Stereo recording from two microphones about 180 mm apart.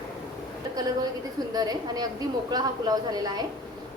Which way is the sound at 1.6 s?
20° right (ahead or behind).